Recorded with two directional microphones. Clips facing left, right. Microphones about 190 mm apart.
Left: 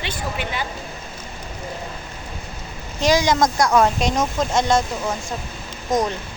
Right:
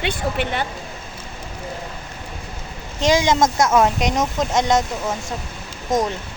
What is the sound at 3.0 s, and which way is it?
A woman's voice, 20° right (ahead or behind).